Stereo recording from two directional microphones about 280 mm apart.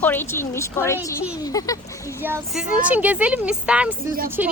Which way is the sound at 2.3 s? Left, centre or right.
Centre.